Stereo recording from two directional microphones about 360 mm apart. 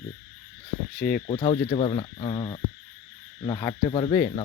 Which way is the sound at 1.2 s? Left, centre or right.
Centre.